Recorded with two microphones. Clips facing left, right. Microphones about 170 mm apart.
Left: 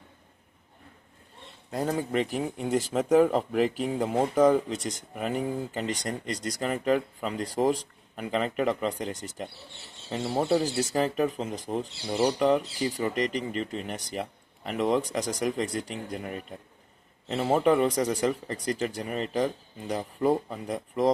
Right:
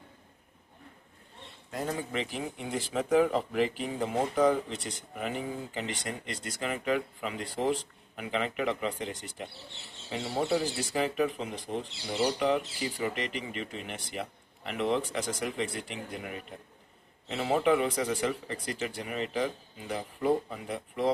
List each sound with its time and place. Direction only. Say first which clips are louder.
1.7 s speech: left 6 dB; 35° left (ahead or behind)